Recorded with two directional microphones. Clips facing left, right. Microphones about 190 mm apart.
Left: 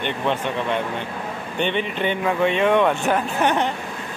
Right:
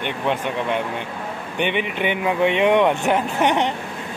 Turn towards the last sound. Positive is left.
turn(degrees=-20)  # may be behind; listen again after turning